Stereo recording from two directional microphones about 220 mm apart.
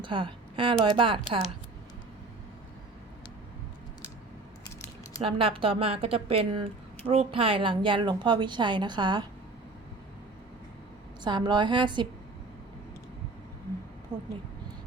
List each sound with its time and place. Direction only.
0.0 s a woman's voice: 20° right (ahead or behind)
5.2 s a woman's voice: 25° right (ahead or behind)
11.2 s a woman's voice: 20° right (ahead or behind)